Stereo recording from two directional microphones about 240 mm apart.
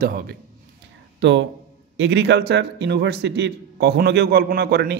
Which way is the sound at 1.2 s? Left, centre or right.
Right.